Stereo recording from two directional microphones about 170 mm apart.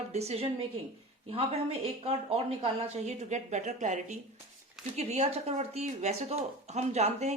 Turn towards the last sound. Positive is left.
turn(degrees=-40)  # may be behind; listen again after turning